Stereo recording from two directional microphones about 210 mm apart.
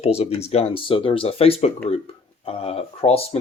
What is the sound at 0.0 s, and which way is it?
Speech, 30° left (ahead or behind).